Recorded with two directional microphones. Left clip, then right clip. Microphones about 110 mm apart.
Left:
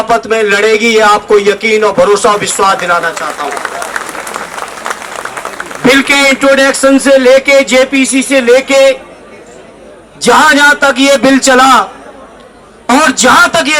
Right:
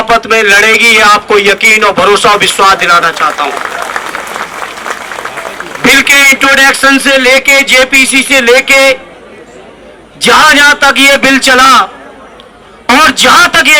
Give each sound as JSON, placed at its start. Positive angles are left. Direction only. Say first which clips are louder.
{"t": 0.0, "sound": "a man's voice", "louder": "right 3 dB", "side_deg": -35}
{"t": 5.8, "sound": "a man's voice", "louder": "right 3 dB", "side_deg": -30}
{"t": 10.2, "sound": "a man's voice", "louder": "right 2 dB", "side_deg": -35}
{"t": 12.9, "sound": "a man's voice", "louder": "right 2 dB", "side_deg": -35}